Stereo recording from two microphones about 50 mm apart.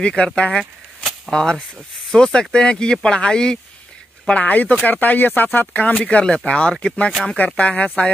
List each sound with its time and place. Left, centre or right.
0.0 s speech: left
4.3 s speech: left
6.0 s speech: left